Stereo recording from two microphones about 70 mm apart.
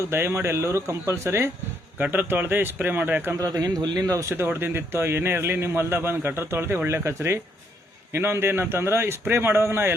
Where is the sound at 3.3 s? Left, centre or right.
Right.